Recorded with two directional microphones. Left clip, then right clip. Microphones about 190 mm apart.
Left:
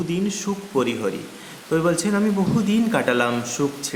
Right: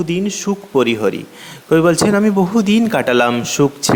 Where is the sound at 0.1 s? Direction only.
35° right (ahead or behind).